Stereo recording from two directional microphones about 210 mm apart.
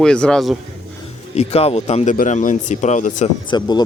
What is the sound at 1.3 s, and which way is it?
A man's voice, 30° left (ahead or behind).